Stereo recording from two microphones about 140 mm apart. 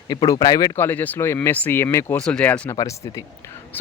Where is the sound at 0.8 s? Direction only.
15° left (ahead or behind).